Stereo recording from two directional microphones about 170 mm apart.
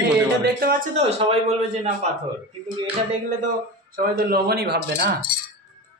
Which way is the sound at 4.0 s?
60° right (ahead or behind).